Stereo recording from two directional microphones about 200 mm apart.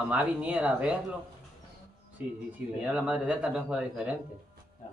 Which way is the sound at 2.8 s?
5° right (ahead or behind).